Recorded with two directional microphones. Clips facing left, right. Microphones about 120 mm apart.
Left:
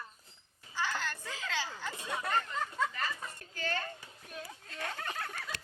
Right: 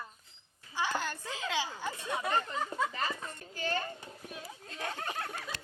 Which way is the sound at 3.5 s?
15° right (ahead or behind).